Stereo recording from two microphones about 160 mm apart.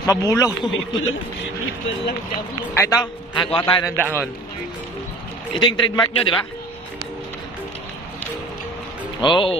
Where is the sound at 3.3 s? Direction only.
30° left (ahead or behind).